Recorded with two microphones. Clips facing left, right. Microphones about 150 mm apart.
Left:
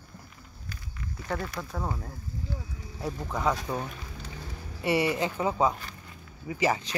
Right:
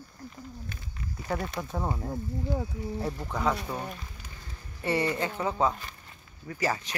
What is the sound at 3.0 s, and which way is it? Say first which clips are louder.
Speech: left 2 dB; 5° left (ahead or behind).